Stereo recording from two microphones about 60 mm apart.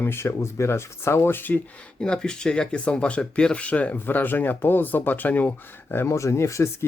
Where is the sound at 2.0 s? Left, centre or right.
Centre; by 6.1 s left.